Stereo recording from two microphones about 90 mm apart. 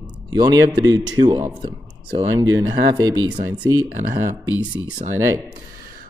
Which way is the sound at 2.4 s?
45° right (ahead or behind).